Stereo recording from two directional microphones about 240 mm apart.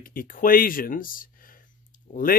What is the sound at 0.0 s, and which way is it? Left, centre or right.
Speech, left.